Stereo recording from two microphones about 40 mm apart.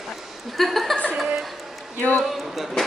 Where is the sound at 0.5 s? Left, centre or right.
Centre.